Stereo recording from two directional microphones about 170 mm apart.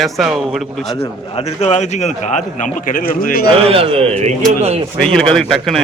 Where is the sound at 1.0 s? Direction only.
35° left (ahead or behind); by 3.5 s 60° left (ahead or behind).